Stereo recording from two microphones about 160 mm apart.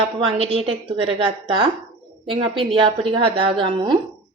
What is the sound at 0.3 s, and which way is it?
A woman's voice, 40° right (ahead or behind).